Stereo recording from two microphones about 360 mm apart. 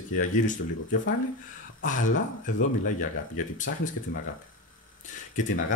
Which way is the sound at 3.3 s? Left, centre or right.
Left.